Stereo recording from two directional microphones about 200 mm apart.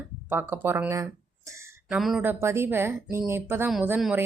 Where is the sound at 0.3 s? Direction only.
10° right (ahead or behind).